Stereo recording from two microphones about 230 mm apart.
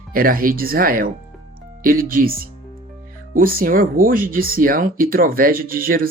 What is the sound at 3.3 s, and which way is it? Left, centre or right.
Speech, right.